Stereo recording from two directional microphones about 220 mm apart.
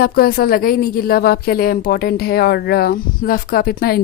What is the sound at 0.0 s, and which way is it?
A woman's voice, 45° left (ahead or behind).